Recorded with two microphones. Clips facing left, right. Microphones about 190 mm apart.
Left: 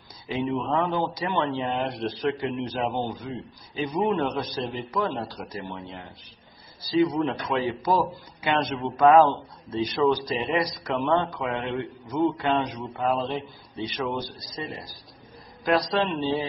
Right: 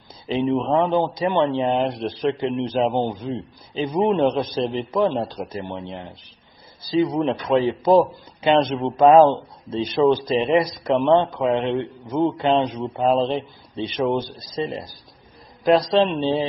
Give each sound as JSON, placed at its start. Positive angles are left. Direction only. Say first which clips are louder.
{"t": 0.3, "sound": "a man's voice", "louder": "right 6 dB", "side_deg": -25}